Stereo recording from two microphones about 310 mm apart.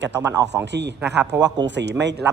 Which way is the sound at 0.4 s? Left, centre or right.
Right.